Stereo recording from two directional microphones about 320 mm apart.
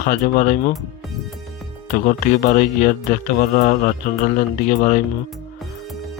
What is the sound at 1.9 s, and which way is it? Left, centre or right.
Speech, left.